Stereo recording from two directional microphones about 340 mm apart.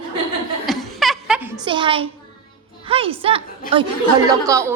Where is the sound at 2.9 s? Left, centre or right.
Centre.